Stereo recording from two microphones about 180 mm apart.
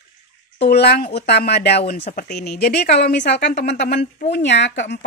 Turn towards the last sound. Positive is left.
turn(degrees=80)